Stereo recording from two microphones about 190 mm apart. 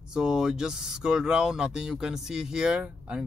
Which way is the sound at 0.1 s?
5° right (ahead or behind).